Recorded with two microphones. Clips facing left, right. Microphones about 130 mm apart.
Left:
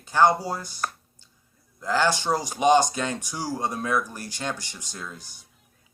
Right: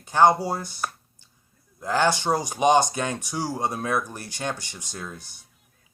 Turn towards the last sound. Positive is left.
turn(degrees=-20)  # may be behind; listen again after turning